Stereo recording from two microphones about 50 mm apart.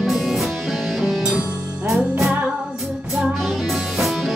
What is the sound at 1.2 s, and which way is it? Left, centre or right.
Music, centre.